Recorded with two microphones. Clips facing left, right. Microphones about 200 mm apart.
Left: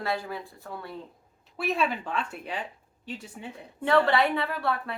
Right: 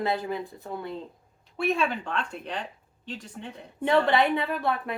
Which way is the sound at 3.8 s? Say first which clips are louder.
Right 1 dB; 20° right (ahead or behind).